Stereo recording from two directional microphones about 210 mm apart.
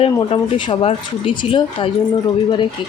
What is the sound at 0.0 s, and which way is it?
A child's voice, 25° left (ahead or behind).